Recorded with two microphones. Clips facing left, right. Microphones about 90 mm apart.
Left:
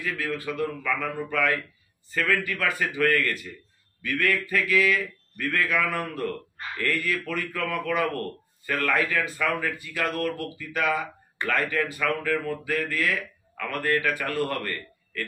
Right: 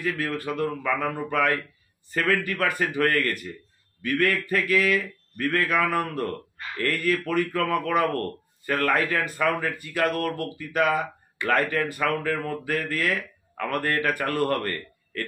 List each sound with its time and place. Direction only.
0.0 s speech: 50° right (ahead or behind)
14.6 s a man's voice: 40° right (ahead or behind)